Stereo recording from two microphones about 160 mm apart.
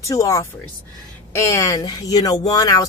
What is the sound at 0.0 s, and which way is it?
Speech, 20° left (ahead or behind).